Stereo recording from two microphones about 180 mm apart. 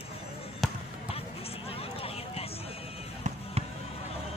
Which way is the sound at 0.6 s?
Centre (ahead or behind).